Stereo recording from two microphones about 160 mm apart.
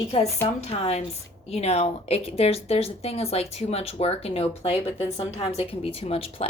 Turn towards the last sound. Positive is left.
turn(degrees=35)  # may be behind; listen again after turning